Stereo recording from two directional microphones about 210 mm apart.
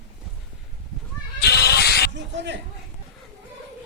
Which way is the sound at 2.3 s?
55° right (ahead or behind).